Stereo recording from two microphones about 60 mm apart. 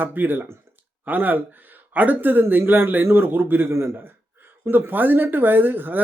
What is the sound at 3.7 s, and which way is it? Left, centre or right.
Speech, right.